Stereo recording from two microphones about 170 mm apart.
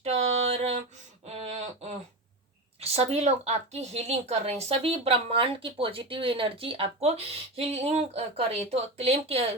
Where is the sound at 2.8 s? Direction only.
35° right (ahead or behind).